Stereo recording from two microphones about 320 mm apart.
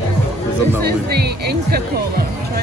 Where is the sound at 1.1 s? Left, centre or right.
Right.